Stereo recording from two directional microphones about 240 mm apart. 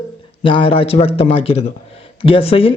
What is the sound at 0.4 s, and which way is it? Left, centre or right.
Speech, left.